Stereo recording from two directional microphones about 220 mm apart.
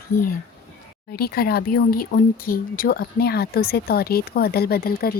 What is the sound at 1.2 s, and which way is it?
Speech, 45° left (ahead or behind).